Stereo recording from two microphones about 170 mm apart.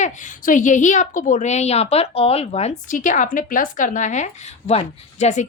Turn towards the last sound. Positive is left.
turn(degrees=40)  # may be behind; listen again after turning